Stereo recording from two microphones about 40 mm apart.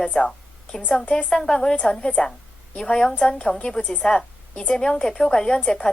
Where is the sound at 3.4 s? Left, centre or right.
Left.